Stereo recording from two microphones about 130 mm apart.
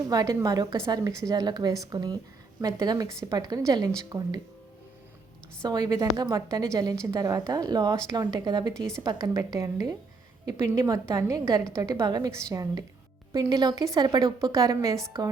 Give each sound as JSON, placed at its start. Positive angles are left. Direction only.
{"t": 0.1, "sound": "a woman's voice", "side_deg": -25}
{"t": 5.6, "sound": "a woman's voice", "side_deg": -30}